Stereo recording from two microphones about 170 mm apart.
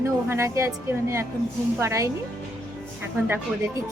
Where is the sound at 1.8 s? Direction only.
15° right (ahead or behind).